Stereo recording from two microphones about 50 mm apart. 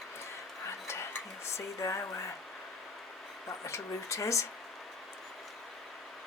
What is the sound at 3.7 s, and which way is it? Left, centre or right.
Speech, left.